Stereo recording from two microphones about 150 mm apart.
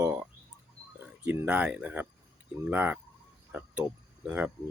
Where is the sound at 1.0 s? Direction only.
15° right (ahead or behind).